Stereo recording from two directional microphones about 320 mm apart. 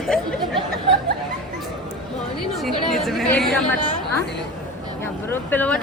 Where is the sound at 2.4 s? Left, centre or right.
Centre.